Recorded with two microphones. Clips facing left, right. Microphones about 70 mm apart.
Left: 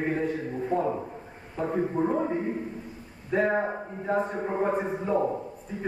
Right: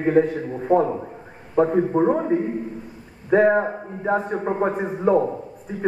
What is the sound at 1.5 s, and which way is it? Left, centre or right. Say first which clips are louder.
Speech: right 9 dB; right.